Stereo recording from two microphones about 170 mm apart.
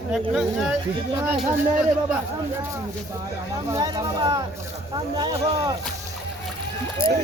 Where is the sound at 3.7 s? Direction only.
25° right (ahead or behind).